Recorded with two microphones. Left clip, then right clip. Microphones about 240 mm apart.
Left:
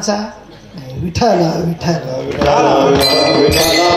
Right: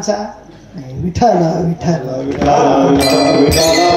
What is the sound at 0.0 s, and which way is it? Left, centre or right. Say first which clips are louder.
Speech: right 1 dB; left.